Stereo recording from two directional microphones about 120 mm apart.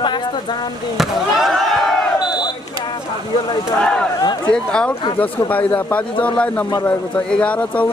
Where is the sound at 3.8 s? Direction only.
5° left (ahead or behind).